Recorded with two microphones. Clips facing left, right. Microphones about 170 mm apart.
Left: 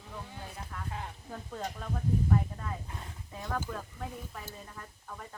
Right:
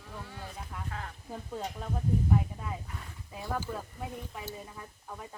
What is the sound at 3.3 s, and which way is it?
A woman's voice, 10° right (ahead or behind).